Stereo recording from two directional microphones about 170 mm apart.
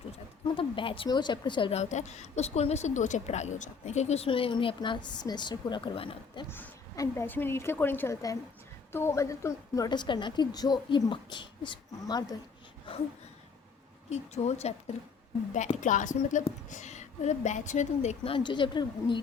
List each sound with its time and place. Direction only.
0.4 s a woman's voice: 30° left (ahead or behind)
6.5 s a woman's voice: 15° left (ahead or behind)
14.1 s a woman's voice: 40° left (ahead or behind)